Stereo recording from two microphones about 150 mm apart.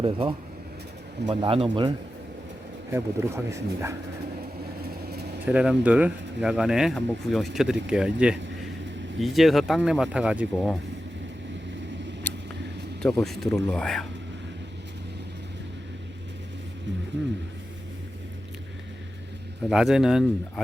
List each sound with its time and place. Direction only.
0.0 s speech: 35° right (ahead or behind)
2.9 s speech: 15° right (ahead or behind)
4.8 s vehicle: 90° right
5.5 s speech: 10° right (ahead or behind)
13.0 s speech: 5° left (ahead or behind)
19.6 s speech: 5° right (ahead or behind)